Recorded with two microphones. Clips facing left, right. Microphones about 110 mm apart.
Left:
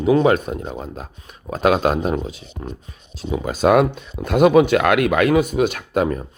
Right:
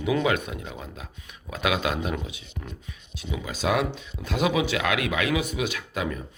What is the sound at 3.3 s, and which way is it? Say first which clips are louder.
Speech: left 10 dB; 50° left (ahead or behind).